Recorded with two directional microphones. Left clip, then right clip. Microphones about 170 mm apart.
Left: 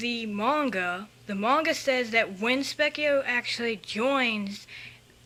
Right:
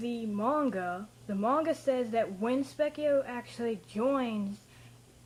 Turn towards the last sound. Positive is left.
turn(degrees=0)  # may be behind; listen again after turning